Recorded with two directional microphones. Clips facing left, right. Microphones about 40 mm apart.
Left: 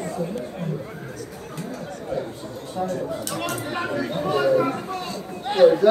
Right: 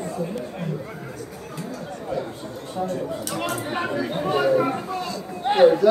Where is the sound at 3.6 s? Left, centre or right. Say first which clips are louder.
Right 1 dB; centre.